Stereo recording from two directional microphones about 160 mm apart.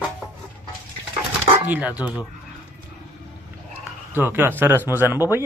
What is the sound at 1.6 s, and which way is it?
Speech, 10° right (ahead or behind).